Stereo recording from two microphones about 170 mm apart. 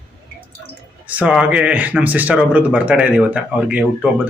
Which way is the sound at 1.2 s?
5° right (ahead or behind).